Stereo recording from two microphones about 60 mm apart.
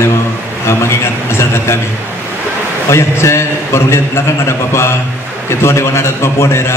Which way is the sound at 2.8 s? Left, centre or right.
Left.